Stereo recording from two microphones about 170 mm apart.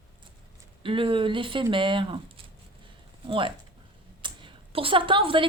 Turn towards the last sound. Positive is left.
turn(degrees=-30)  # may be behind; listen again after turning